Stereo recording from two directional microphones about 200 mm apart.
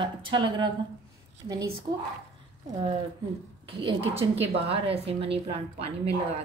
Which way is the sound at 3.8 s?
30° right (ahead or behind).